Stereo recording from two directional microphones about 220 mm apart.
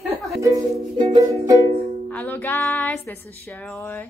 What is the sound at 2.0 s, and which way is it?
Music, 5° left (ahead or behind).